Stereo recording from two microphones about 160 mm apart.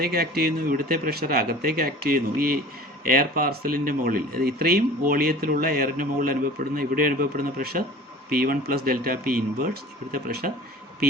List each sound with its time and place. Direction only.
0.0 s speech: 70° right (ahead or behind)